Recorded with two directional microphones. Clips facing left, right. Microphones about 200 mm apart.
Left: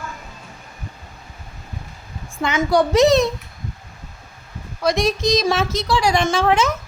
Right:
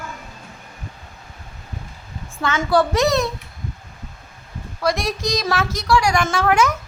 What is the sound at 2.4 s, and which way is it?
Speech, 15° left (ahead or behind).